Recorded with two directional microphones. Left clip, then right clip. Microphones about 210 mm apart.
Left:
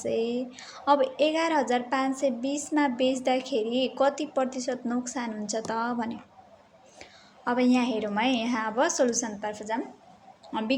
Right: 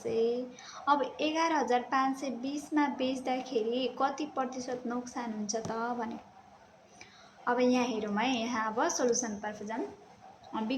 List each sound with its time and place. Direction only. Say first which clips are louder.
0.0 s a woman's voice: left 2 dB; 35° left (ahead or behind)